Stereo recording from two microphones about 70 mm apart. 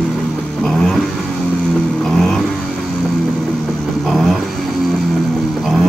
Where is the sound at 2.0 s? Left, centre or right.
Centre.